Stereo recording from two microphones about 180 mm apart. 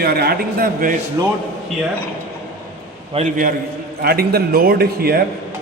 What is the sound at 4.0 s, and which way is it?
A man's voice, 60° right (ahead or behind).